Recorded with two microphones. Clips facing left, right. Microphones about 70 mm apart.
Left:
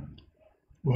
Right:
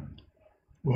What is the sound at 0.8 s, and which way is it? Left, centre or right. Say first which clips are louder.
Speech: even; right.